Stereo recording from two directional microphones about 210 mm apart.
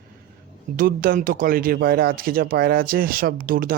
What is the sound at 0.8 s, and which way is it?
Speech, 40° right (ahead or behind).